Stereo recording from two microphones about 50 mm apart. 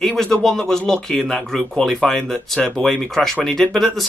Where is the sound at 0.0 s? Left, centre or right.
Centre.